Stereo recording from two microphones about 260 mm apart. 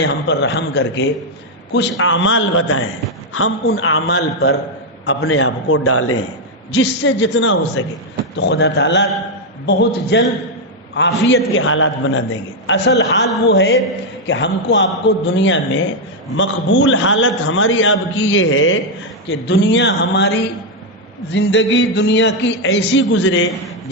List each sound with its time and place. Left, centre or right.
0.0 s a man's voice: left
5.0 s a man's voice: left
11.3 s a man's voice: left